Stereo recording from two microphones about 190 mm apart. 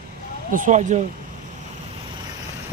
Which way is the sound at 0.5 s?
40° right (ahead or behind).